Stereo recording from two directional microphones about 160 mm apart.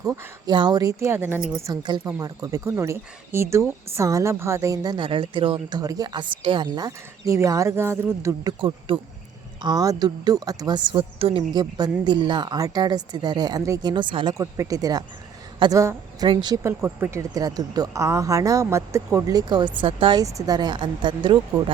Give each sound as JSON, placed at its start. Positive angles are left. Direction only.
{"t": 0.0, "sound": "speech", "side_deg": -20}
{"t": 8.9, "sound": "speech", "side_deg": -35}
{"t": 9.6, "sound": "speech", "side_deg": -20}
{"t": 11.5, "sound": "speech", "side_deg": -25}
{"t": 14.3, "sound": "speech", "side_deg": -20}
{"t": 15.8, "sound": "a woman's voice", "side_deg": -20}
{"t": 16.6, "sound": "speech", "side_deg": -15}